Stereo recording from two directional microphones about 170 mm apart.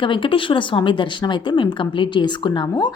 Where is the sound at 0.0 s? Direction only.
30° left (ahead or behind).